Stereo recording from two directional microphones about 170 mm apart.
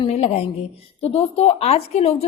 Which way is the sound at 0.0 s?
35° left (ahead or behind).